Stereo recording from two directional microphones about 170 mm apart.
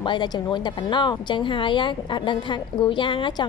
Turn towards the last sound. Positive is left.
turn(degrees=30)  # may be behind; listen again after turning